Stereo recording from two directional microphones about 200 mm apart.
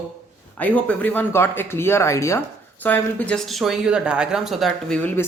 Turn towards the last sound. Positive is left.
turn(degrees=10)  # may be behind; listen again after turning